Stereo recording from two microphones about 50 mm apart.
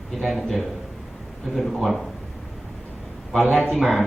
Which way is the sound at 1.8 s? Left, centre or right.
Centre.